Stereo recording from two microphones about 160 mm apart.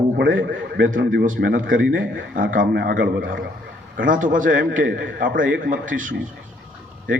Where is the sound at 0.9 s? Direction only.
55° right (ahead or behind).